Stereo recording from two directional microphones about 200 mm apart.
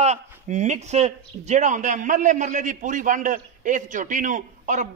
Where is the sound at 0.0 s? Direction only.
35° right (ahead or behind).